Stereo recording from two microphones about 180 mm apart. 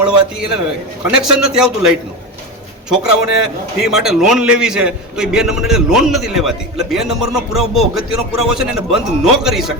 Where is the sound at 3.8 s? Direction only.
Centre (ahead or behind).